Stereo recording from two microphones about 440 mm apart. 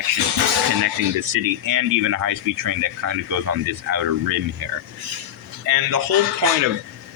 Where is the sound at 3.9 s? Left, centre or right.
Right.